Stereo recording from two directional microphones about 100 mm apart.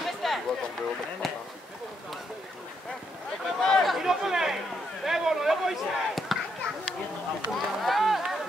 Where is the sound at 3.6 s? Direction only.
Centre (ahead or behind).